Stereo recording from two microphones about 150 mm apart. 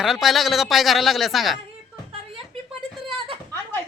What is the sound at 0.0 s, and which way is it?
A man's voice, centre (ahead or behind).